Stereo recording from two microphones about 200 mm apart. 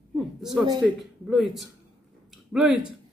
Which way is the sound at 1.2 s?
Centre (ahead or behind).